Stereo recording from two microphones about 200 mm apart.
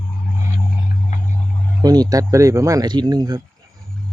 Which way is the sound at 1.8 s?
20° right (ahead or behind).